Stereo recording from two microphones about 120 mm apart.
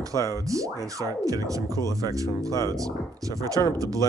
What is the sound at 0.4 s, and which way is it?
Speech, 25° right (ahead or behind).